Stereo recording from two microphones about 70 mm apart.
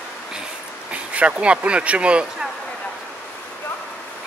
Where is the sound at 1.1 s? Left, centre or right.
Centre.